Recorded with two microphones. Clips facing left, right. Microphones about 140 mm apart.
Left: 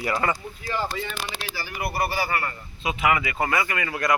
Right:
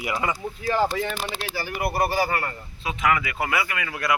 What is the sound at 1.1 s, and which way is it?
Speech, 65° left (ahead or behind).